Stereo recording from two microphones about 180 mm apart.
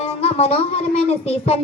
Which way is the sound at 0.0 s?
35° left (ahead or behind).